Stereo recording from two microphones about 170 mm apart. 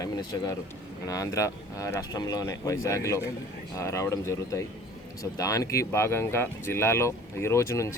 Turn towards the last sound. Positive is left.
turn(degrees=15)  # may be behind; listen again after turning